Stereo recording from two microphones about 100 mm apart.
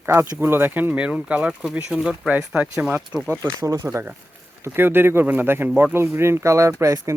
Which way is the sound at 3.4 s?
30° right (ahead or behind).